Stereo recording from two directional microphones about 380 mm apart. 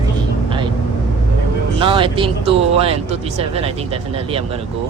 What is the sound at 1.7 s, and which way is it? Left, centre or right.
Speech, centre.